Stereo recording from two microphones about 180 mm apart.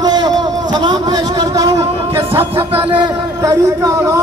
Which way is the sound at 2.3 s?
30° right (ahead or behind).